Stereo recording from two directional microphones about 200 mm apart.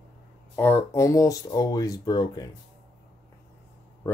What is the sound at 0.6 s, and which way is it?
Speech, 15° left (ahead or behind).